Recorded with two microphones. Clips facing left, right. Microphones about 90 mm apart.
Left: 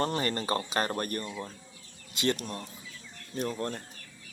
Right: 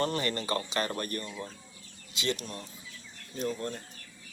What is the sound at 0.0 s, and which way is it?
Speech, 35° left (ahead or behind).